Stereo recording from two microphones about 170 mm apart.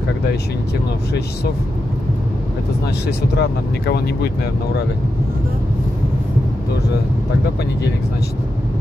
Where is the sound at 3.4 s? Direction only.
75° left (ahead or behind).